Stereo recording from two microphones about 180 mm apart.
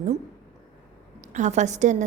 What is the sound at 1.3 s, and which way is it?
Speech, 40° right (ahead or behind).